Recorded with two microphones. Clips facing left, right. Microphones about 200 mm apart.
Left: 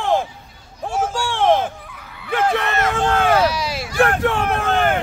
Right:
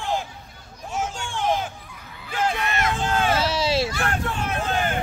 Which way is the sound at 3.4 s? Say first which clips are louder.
Even; 25° right (ahead or behind).